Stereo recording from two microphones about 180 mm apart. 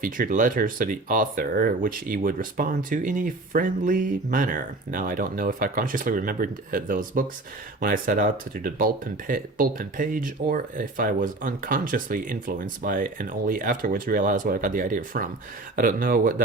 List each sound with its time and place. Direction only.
0.0 s speech: 50° right (ahead or behind)